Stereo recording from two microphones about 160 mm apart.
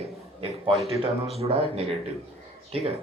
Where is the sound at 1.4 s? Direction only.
40° right (ahead or behind).